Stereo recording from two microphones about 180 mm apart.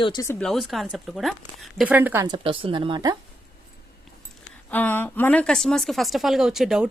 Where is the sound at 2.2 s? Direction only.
25° right (ahead or behind).